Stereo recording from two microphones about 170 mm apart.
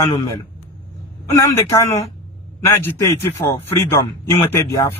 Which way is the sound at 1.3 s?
15° left (ahead or behind).